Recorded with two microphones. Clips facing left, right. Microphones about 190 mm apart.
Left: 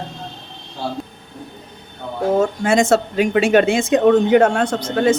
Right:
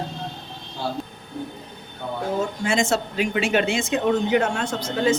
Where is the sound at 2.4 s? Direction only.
50° left (ahead or behind).